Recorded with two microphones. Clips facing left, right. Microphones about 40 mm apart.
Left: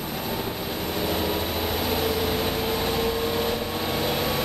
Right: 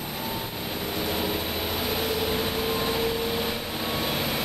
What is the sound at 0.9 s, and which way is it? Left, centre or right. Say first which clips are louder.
Vehicle: left 2 dB; centre.